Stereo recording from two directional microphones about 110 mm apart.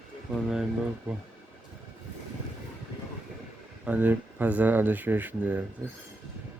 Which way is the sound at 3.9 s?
15° right (ahead or behind).